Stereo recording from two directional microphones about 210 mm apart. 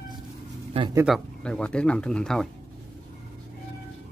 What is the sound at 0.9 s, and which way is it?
Speech, centre (ahead or behind).